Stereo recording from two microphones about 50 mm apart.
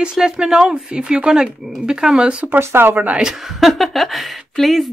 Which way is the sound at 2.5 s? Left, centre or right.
Right.